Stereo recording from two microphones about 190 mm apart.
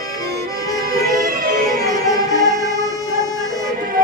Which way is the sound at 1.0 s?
50° right (ahead or behind).